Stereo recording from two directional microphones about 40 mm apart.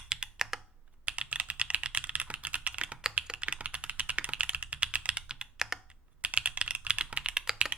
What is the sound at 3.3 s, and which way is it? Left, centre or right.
Computer keyboard, right.